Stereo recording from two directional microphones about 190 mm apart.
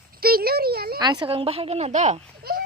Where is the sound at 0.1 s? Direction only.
50° right (ahead or behind).